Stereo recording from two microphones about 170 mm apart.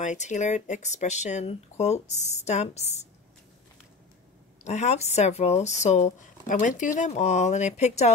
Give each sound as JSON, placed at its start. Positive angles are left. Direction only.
{"t": 0.0, "sound": "speech", "side_deg": 45}
{"t": 4.6, "sound": "speech", "side_deg": 40}